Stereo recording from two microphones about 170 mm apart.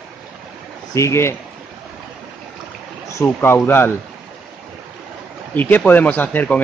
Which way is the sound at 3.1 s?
15° left (ahead or behind).